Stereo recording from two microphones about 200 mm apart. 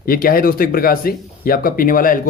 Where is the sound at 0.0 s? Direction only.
45° left (ahead or behind).